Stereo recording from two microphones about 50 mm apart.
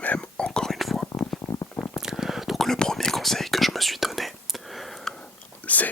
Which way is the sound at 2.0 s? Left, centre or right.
Centre.